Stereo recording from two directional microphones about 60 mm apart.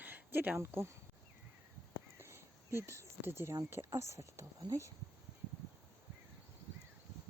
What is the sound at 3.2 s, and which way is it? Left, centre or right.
Speech, right.